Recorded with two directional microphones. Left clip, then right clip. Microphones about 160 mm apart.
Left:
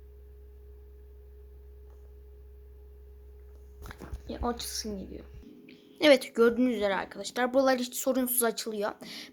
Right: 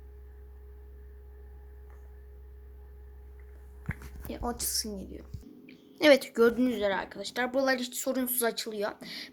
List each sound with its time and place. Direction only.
4.3 s a woman's voice: 15° left (ahead or behind)
7.4 s speech: 35° left (ahead or behind)